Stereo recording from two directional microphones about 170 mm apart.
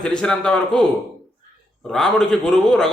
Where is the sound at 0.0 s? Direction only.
5° left (ahead or behind).